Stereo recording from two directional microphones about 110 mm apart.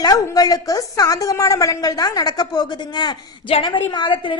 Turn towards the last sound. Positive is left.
turn(degrees=45)  # may be behind; listen again after turning